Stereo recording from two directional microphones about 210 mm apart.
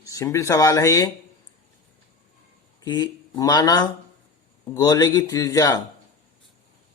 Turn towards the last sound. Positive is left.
turn(degrees=15)  # may be behind; listen again after turning